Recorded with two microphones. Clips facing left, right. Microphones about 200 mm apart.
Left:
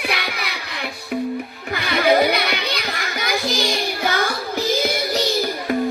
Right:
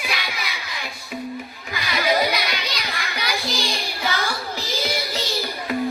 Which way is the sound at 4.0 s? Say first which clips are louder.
Left 4 dB; 55° left (ahead or behind).